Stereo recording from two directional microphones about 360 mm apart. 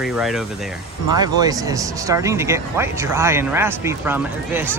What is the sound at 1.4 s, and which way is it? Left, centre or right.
Speech, centre.